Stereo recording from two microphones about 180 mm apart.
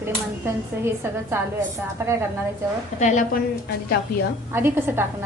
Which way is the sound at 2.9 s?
40° left (ahead or behind).